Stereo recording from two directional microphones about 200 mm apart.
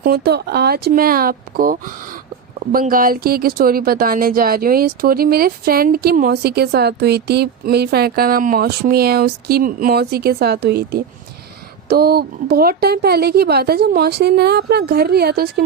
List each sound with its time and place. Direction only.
0.0 s speech: 50° right (ahead or behind)